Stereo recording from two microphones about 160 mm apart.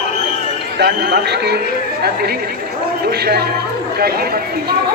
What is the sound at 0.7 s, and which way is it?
Speech, 90° right.